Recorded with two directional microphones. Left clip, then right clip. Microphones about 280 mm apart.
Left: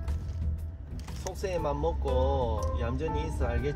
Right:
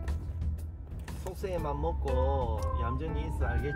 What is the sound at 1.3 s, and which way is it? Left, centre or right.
Speech, left.